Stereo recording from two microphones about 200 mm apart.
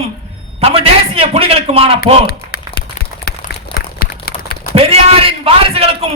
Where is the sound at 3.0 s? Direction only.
50° left (ahead or behind).